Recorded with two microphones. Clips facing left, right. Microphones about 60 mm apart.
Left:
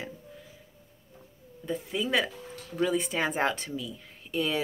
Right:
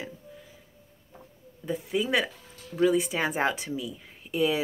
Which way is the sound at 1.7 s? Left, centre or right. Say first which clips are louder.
Right 2 dB; centre.